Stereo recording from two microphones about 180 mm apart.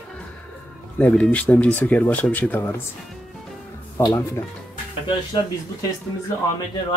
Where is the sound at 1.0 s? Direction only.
5° left (ahead or behind).